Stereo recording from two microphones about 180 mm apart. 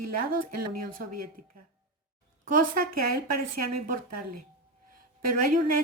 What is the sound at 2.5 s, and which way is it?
Speech, 55° right (ahead or behind).